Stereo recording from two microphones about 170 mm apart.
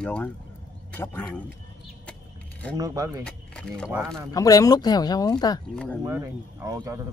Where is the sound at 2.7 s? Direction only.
20° right (ahead or behind).